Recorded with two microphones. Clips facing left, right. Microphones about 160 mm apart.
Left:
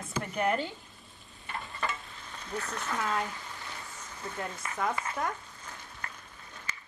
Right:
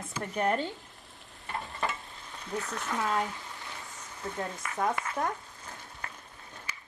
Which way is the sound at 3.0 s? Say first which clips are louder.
Right 2 dB; centre (ahead or behind).